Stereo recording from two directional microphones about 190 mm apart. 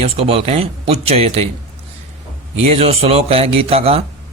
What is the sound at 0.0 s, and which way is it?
Speech, 30° right (ahead or behind).